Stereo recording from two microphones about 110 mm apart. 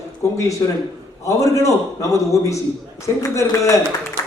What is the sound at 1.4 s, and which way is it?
A man's voice, 30° left (ahead or behind).